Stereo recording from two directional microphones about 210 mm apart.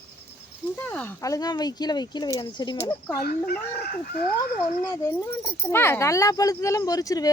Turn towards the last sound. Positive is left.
turn(degrees=15)  # may be behind; listen again after turning